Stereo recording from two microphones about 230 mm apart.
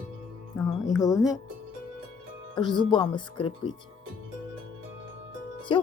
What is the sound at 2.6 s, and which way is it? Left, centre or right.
Speech, centre.